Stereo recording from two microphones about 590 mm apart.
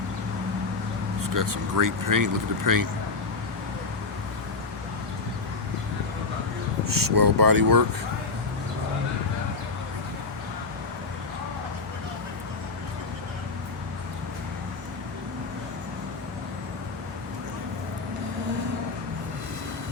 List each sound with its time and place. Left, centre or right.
1.3 s speech: right
6.8 s speech: right